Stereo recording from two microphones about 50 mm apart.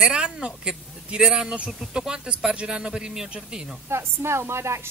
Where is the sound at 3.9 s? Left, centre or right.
Right.